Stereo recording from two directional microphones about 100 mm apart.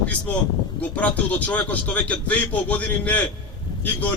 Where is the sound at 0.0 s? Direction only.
15° left (ahead or behind).